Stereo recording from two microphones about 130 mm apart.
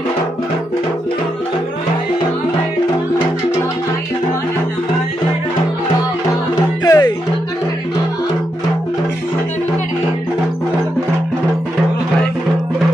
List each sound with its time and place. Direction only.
6.8 s music: 30° left (ahead or behind)